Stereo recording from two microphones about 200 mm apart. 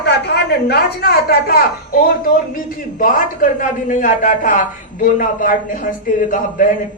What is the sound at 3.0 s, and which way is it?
A man's voice, 40° left (ahead or behind).